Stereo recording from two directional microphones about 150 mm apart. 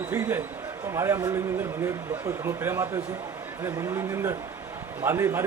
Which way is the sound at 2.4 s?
15° right (ahead or behind).